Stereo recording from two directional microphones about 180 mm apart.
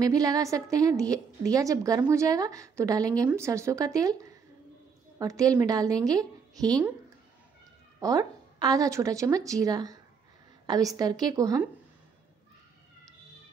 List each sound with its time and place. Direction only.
0.0 s a woman's voice: 20° right (ahead or behind)
8.0 s a woman's voice: 20° right (ahead or behind)